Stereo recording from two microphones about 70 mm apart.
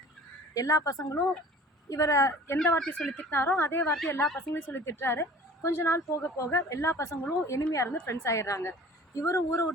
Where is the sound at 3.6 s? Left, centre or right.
Left.